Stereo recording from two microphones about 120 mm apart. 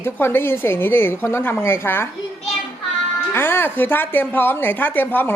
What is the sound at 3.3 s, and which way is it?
Speech, 20° left (ahead or behind).